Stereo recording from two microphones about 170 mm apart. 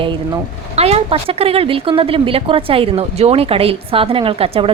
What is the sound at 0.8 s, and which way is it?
Speech, 35° right (ahead or behind).